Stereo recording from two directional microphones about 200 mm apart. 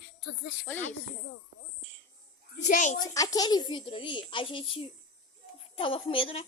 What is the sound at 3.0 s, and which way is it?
A child's voice, 20° left (ahead or behind).